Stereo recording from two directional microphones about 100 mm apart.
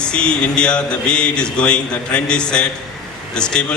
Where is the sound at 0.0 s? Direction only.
10° left (ahead or behind).